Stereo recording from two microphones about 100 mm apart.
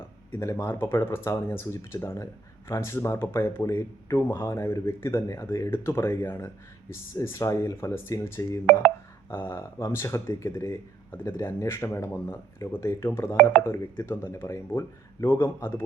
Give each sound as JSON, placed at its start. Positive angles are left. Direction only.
{"t": 0.6, "sound": "speech", "side_deg": 25}
{"t": 13.3, "sound": "speech", "side_deg": 15}
{"t": 13.7, "sound": "speech", "side_deg": 25}